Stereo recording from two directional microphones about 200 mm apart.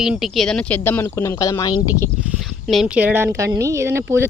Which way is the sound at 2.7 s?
5° right (ahead or behind).